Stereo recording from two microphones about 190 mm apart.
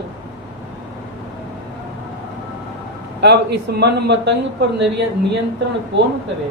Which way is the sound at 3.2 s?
60° right (ahead or behind).